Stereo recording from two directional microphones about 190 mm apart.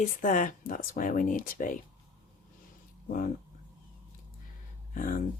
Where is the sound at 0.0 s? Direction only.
45° left (ahead or behind).